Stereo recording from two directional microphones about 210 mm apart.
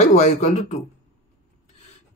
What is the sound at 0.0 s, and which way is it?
Speech, 30° left (ahead or behind).